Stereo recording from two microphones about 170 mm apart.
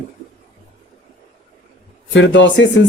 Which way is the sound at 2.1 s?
90° left.